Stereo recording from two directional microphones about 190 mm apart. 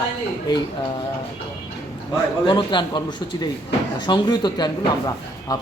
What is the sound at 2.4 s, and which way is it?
Speech, 25° left (ahead or behind).